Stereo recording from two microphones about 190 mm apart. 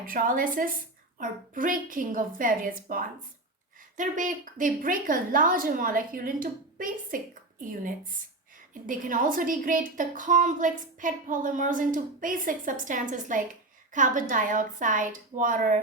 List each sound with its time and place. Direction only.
0.0 s a woman's voice: 50° right (ahead or behind)